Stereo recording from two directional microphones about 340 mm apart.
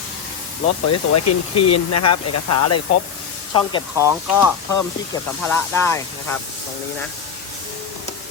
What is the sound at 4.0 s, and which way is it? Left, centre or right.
Speech, centre.